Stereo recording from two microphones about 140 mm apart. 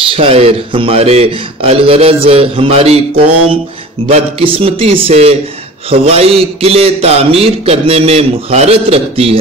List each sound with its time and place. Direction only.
0.1 s a man's voice: 45° right (ahead or behind)
4.1 s a man's voice: 45° right (ahead or behind)